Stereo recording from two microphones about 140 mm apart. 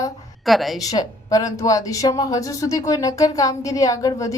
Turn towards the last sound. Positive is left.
turn(degrees=25)  # may be behind; listen again after turning